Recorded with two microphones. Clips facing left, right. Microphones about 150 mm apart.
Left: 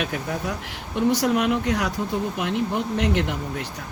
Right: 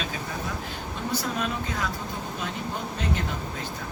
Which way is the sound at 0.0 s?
70° left (ahead or behind).